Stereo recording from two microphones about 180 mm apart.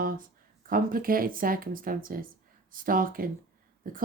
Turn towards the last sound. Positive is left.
turn(degrees=-50)  # may be behind; listen again after turning